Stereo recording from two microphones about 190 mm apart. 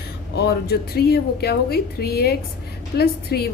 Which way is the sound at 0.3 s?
55° left (ahead or behind).